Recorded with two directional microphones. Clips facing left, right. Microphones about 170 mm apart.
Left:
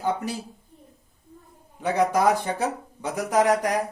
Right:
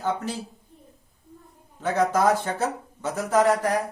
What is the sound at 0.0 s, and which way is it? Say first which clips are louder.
Speech: left 1 dB; 10° left (ahead or behind).